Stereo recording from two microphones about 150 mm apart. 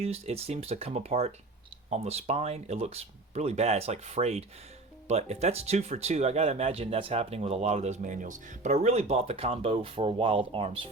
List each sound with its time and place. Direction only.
0.0 s speech: 45° right (ahead or behind)